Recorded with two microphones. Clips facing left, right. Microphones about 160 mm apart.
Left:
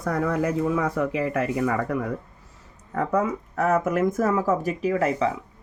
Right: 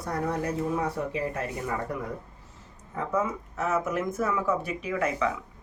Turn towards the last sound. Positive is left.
turn(degrees=35)  # may be behind; listen again after turning